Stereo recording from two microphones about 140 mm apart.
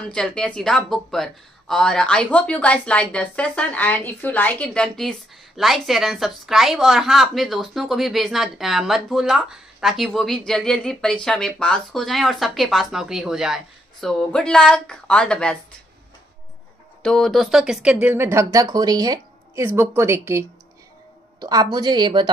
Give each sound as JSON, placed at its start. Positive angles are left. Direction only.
{"t": 0.1, "sound": "a woman's voice", "side_deg": 5}
{"t": 17.0, "sound": "a woman's voice", "side_deg": 5}
{"t": 18.0, "sound": "a woman's voice", "side_deg": -15}
{"t": 19.6, "sound": "a woman's voice", "side_deg": -15}